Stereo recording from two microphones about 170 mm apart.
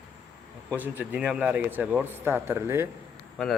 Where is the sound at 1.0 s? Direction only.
5° right (ahead or behind).